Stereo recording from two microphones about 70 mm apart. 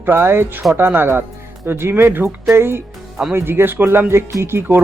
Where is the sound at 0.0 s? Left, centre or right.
Right.